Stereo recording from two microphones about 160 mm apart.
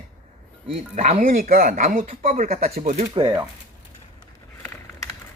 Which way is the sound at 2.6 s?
40° right (ahead or behind).